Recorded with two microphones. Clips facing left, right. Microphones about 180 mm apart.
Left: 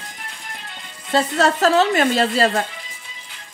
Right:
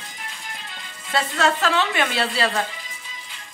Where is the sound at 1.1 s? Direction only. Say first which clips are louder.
Left 4 dB; 40° left (ahead or behind).